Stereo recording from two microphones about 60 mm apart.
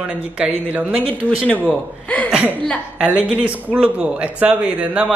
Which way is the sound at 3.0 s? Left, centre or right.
Centre.